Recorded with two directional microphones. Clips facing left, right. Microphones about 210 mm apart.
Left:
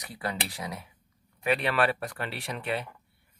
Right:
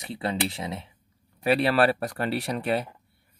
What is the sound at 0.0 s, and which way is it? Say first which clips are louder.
Speech: right 6 dB; 25° right (ahead or behind).